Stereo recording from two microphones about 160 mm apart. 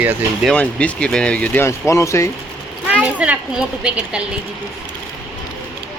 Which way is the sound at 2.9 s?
10° right (ahead or behind).